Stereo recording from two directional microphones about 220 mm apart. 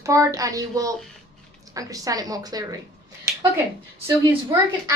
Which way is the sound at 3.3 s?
15° right (ahead or behind).